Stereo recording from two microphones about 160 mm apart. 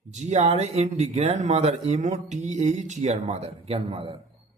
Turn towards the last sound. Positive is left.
turn(degrees=-35)  # may be behind; listen again after turning